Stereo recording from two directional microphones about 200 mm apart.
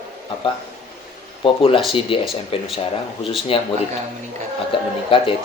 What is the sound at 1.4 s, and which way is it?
Speech, 25° left (ahead or behind).